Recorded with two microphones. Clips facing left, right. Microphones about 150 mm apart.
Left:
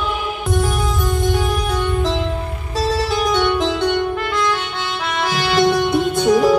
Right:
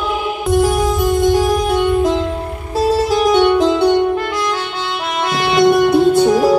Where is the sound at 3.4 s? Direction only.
35° right (ahead or behind).